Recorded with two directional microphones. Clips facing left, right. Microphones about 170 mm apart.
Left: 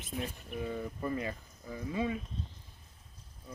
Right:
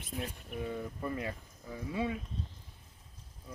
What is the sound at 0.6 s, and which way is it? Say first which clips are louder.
Speech: left 1 dB; 5° left (ahead or behind).